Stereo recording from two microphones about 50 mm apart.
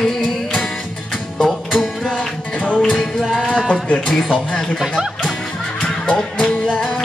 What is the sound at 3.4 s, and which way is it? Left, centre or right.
Music, centre.